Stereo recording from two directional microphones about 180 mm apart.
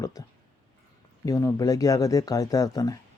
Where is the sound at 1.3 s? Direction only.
20° left (ahead or behind).